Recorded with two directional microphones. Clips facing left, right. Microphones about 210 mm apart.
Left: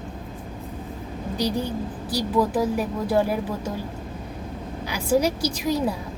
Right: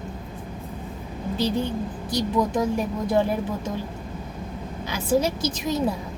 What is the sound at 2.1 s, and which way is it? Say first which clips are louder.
A woman's voice: left 1 dB; 5° left (ahead or behind).